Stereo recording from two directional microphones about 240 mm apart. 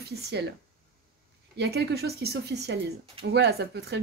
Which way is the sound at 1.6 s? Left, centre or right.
Right.